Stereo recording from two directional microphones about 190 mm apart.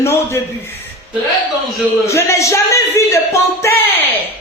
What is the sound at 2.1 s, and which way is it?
Speech, 15° left (ahead or behind).